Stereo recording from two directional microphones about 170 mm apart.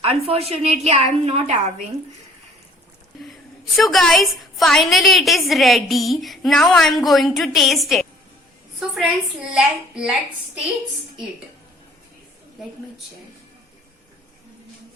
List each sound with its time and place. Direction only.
0.3 s a woman's voice: 35° right (ahead or behind)
3.7 s a woman's voice: centre (ahead or behind)